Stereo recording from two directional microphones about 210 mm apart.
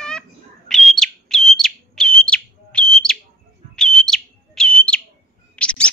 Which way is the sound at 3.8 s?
5° left (ahead or behind).